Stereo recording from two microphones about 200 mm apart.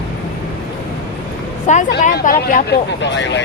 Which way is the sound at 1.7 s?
35° left (ahead or behind).